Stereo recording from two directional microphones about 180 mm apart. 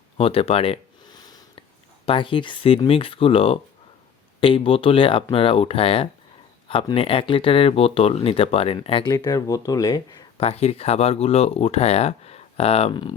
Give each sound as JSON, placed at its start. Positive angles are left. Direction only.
{"t": 0.2, "sound": "a sound", "side_deg": 30}
{"t": 2.0, "sound": "speech", "side_deg": 30}
{"t": 10.4, "sound": "speech", "side_deg": 35}